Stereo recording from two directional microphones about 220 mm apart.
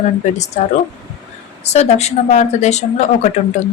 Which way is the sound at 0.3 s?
30° left (ahead or behind).